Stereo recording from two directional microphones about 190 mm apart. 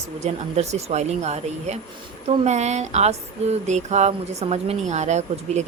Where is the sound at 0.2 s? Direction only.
35° right (ahead or behind).